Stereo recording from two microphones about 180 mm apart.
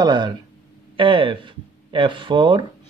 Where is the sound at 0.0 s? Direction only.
25° right (ahead or behind).